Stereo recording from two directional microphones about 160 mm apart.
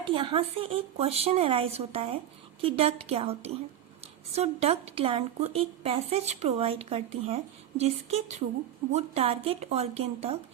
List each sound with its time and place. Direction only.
0.0 s speech: 35° right (ahead or behind)